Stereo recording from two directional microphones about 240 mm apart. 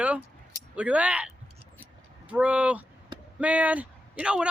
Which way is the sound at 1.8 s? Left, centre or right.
Centre.